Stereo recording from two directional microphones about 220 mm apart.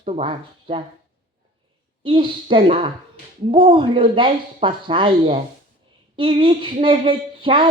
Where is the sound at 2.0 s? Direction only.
20° right (ahead or behind).